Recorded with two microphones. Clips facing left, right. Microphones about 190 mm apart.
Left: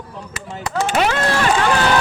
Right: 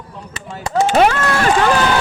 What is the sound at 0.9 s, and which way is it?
Speech, 45° right (ahead or behind).